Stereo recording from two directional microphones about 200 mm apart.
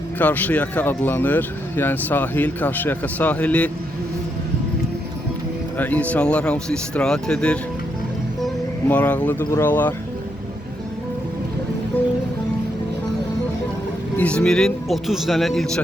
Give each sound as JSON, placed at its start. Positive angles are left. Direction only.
{"t": 0.2, "sound": "speech", "side_deg": 10}
{"t": 5.7, "sound": "speech", "side_deg": 10}
{"t": 8.9, "sound": "speech", "side_deg": 10}
{"t": 14.2, "sound": "speech", "side_deg": 5}